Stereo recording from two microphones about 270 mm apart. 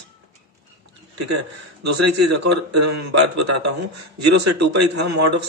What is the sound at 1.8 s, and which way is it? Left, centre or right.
A man's voice, right.